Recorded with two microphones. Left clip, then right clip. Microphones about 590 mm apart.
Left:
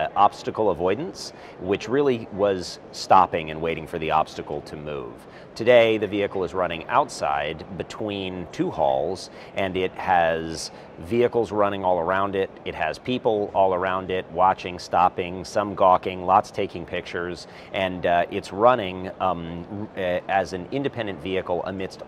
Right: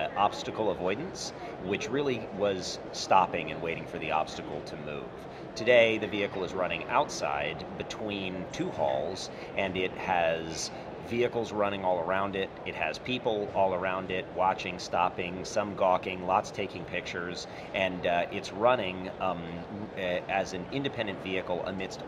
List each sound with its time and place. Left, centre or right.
0.0 s speech: left